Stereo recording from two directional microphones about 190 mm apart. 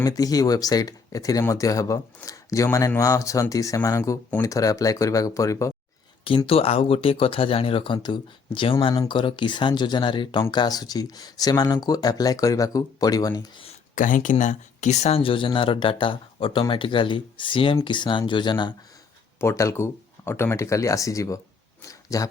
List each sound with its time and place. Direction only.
0.0 s speech: 20° left (ahead or behind)
6.2 s speech: 30° left (ahead or behind)
13.9 s speech: 45° left (ahead or behind); by 22.3 s 15° left (ahead or behind)